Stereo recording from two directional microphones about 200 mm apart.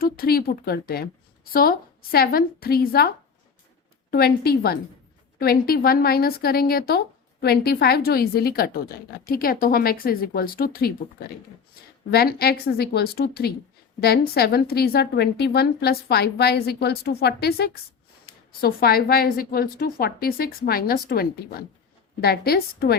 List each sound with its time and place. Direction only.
0.0 s a woman's voice: 50° left (ahead or behind)
4.1 s a woman's voice: 50° left (ahead or behind)